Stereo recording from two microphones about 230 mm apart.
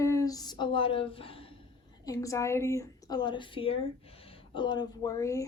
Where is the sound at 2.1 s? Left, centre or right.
Centre.